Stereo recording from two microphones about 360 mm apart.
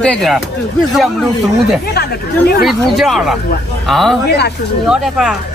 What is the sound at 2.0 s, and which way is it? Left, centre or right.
Speech, left.